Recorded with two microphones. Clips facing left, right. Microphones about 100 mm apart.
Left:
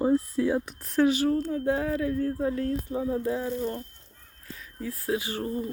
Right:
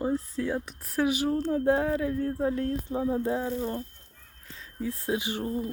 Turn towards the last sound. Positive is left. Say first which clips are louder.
# even
turn(degrees=-20)  # may be behind; listen again after turning